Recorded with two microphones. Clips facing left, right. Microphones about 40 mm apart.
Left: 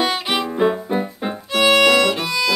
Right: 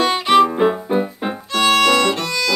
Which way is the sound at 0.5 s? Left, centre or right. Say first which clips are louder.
Right 1 dB; centre.